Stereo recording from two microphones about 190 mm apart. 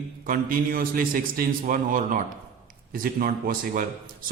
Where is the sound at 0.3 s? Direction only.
50° right (ahead or behind).